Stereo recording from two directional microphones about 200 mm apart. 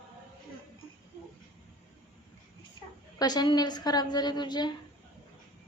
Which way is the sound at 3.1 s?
20° left (ahead or behind).